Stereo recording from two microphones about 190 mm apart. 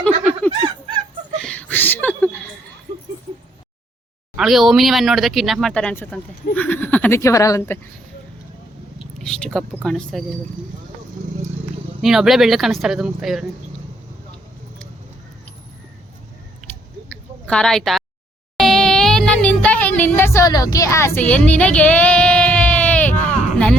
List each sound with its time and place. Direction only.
0.6 s fowl: 25° right (ahead or behind)
1.4 s a sound: 5° left (ahead or behind)
4.4 s speech: centre (ahead or behind); by 7.8 s 15° left (ahead or behind)
9.2 s speech: 5° left (ahead or behind)
12.0 s speech: centre (ahead or behind)
16.6 s chewing: centre (ahead or behind)
17.1 s a sound: 5° left (ahead or behind)
18.5 s music: centre (ahead or behind)